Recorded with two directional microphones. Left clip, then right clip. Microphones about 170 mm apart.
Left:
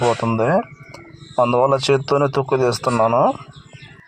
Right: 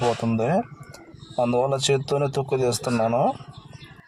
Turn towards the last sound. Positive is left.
turn(degrees=5)  # may be behind; listen again after turning